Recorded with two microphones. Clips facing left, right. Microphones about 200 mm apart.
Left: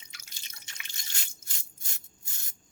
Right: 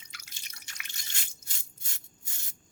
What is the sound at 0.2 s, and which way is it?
Drip, 25° left (ahead or behind).